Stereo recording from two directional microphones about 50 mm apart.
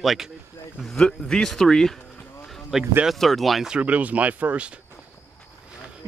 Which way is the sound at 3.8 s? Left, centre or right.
Right.